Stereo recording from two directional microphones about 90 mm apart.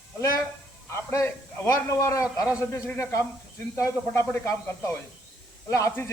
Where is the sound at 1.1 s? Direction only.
35° left (ahead or behind).